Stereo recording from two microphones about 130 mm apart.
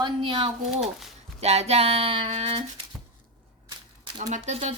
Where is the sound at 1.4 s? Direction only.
55° right (ahead or behind).